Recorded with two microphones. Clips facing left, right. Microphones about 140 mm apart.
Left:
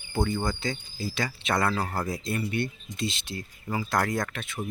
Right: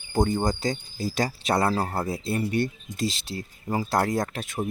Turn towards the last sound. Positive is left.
turn(degrees=-45)  # may be behind; listen again after turning